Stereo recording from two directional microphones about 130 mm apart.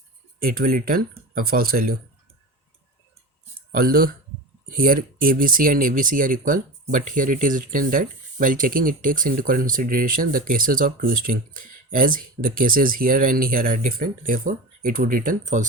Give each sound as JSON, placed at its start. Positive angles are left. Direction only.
{"t": 0.3, "sound": "speech", "side_deg": -90}
{"t": 3.7, "sound": "speech", "side_deg": -90}